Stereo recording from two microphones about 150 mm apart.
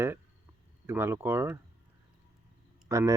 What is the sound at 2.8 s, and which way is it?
Speech, 20° right (ahead or behind).